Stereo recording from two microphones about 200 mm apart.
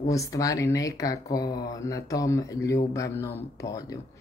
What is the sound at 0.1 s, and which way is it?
Speech, 15° left (ahead or behind).